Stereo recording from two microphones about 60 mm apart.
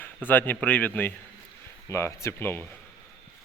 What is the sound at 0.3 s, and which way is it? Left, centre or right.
Speech, left.